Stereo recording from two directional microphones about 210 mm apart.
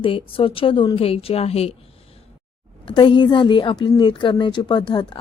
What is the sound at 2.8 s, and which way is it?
Speech, 25° left (ahead or behind).